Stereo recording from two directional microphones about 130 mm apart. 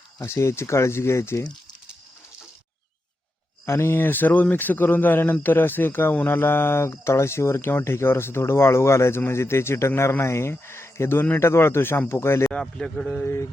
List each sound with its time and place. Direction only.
0.2 s speech: 20° left (ahead or behind)
3.7 s speech: 15° left (ahead or behind)
12.5 s speech: 5° left (ahead or behind)
13.2 s speech: 20° left (ahead or behind)